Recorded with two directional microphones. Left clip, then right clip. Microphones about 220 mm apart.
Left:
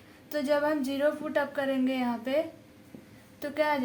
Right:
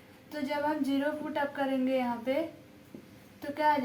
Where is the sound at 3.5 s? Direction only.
45° left (ahead or behind).